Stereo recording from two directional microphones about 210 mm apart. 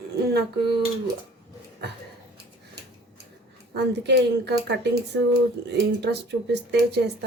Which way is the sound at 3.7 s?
55° right (ahead or behind).